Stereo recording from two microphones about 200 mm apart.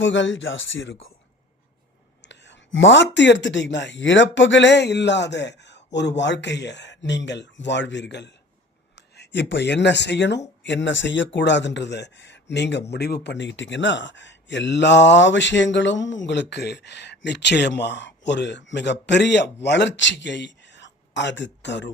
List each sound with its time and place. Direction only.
0.0 s speech: 65° left (ahead or behind)
2.2 s speech: 60° left (ahead or behind)